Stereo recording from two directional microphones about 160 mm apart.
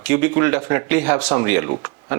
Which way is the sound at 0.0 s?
10° right (ahead or behind).